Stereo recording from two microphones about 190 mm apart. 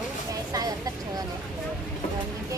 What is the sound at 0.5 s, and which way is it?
Vehicle, 20° right (ahead or behind).